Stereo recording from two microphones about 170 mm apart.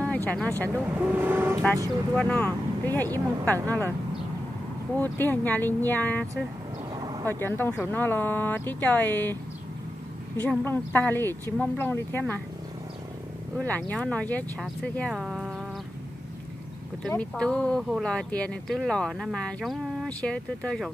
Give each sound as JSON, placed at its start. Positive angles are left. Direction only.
{"t": 0.0, "sound": "speech", "side_deg": 10}
{"t": 0.7, "sound": "speech", "side_deg": -10}
{"t": 2.1, "sound": "speech", "side_deg": 5}
{"t": 4.9, "sound": "speech", "side_deg": 10}
{"t": 7.0, "sound": "vehicle", "side_deg": -25}
{"t": 7.2, "sound": "speech", "side_deg": 15}
{"t": 13.6, "sound": "speech", "side_deg": 10}
{"t": 17.1, "sound": "speech", "side_deg": 5}